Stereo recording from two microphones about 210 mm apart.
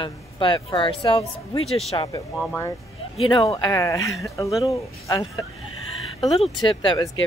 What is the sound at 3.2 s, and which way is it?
Speech, 20° left (ahead or behind).